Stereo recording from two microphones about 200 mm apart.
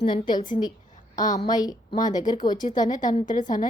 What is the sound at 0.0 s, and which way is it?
A woman's voice, 25° left (ahead or behind).